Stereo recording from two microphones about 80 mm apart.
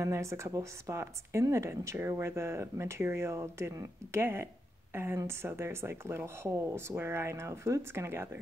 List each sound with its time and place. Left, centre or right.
0.0 s speech: right